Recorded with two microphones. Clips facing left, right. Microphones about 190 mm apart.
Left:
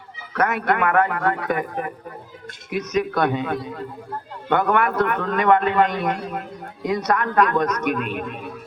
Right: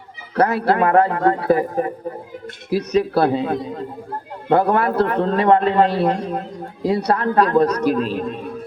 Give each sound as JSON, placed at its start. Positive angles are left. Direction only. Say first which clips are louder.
{"t": 0.3, "sound": "a man's voice", "louder": "right 4 dB", "side_deg": -30}